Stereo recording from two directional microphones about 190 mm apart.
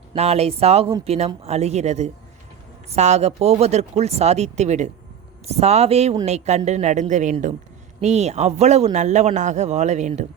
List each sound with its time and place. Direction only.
0.2 s speech: 35° right (ahead or behind)